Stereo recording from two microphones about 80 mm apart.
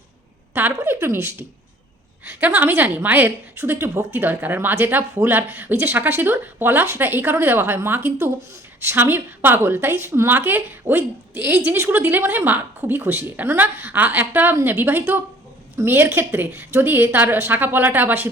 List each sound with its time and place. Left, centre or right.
0.5 s a woman's voice: right